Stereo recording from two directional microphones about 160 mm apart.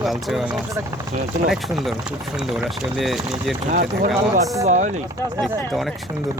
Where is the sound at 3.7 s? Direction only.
55° right (ahead or behind).